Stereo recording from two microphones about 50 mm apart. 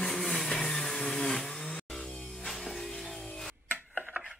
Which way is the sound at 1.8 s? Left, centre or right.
Centre.